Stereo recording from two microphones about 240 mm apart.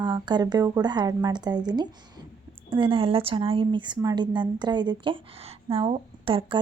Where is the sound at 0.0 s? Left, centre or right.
Centre.